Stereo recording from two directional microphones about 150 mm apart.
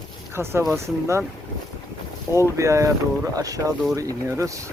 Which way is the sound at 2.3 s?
20° right (ahead or behind).